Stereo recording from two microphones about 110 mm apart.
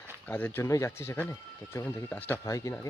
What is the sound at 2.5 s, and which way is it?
Speech, 30° left (ahead or behind).